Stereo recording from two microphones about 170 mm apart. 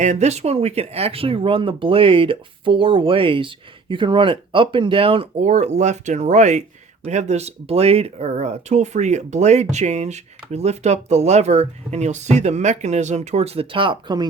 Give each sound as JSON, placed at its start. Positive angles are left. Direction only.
{"t": 0.0, "sound": "speech", "side_deg": -40}